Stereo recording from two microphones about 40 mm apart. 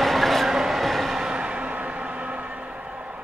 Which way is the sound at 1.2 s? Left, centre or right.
Right.